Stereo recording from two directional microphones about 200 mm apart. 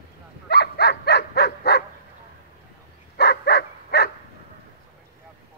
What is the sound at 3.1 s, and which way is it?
Dog, 55° left (ahead or behind).